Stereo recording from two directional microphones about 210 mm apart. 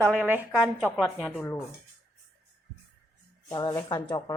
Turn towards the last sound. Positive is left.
turn(degrees=15)  # may be behind; listen again after turning